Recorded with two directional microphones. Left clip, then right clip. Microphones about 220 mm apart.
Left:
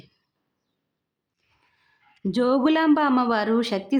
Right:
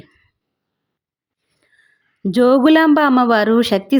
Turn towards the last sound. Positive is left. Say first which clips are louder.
# right 9 dB
turn(degrees=-30)  # may be behind; listen again after turning